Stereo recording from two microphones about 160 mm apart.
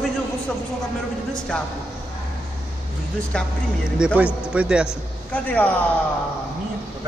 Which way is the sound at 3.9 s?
5° right (ahead or behind).